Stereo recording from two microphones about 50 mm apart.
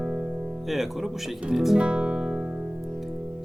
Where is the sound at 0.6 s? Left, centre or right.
Centre.